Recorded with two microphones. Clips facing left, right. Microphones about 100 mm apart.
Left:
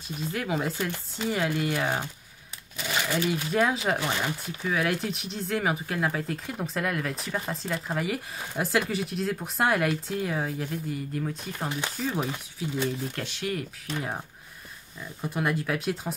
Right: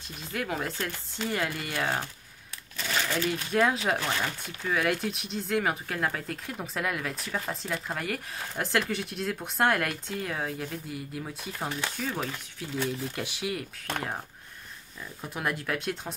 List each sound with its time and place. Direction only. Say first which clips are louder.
0.2 s speech: left 3 dB; centre (ahead or behind)
3.4 s speech: right 1 dB; centre (ahead or behind)
4.0 s speech: left 2 dB; 15° left (ahead or behind)
4.6 s speech: even; centre (ahead or behind)
12.1 s speech: left 6 dB; 15° left (ahead or behind)
12.8 s speech: left 2 dB; 10° right (ahead or behind)
15.2 s speech: left 4 dB; centre (ahead or behind)